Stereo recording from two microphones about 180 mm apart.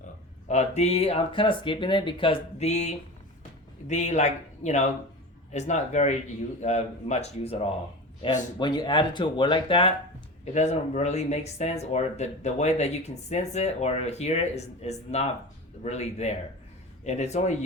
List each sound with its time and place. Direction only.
0.4 s speech: 40° left (ahead or behind)
8.5 s speech: 25° left (ahead or behind)
10.4 s speech: 40° left (ahead or behind)